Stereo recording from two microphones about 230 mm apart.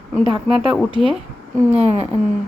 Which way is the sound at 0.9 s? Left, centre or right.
Right.